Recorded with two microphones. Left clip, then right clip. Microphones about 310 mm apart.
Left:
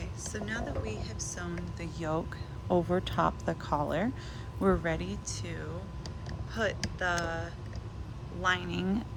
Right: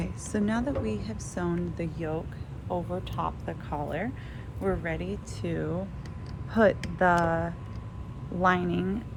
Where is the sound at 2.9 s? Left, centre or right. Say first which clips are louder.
Left 3 dB; left; by 7.3 s centre.